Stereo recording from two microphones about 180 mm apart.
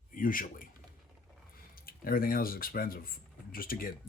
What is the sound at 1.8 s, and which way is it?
Speech, 55° left (ahead or behind).